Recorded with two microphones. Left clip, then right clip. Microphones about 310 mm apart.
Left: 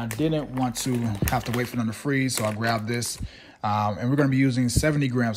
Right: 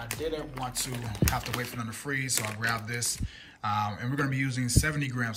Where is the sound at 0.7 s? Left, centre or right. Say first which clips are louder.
Left 7 dB; centre.